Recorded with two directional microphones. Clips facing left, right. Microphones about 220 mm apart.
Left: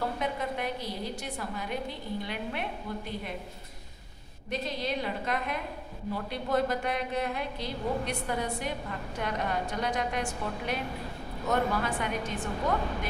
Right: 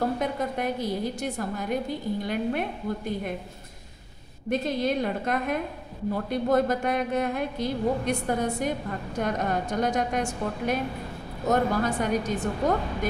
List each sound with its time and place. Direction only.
0.2 s a woman's voice: 45° right (ahead or behind)
4.5 s a woman's voice: 50° right (ahead or behind)